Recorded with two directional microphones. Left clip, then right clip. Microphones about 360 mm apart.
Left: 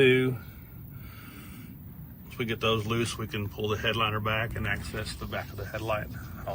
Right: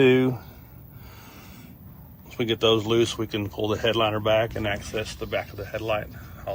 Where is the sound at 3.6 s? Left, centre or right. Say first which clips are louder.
Right 5 dB; right.